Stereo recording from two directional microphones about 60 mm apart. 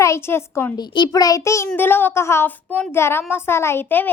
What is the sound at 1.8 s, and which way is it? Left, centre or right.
Speech, left.